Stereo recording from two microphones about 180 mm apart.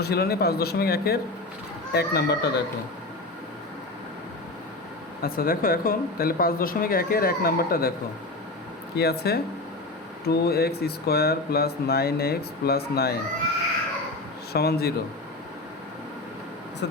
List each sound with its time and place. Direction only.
0.0 s speech: 60° left (ahead or behind)
5.2 s speech: 55° left (ahead or behind)
9.0 s speech: 60° left (ahead or behind)
14.5 s speech: 60° left (ahead or behind)
16.8 s speech: 75° left (ahead or behind)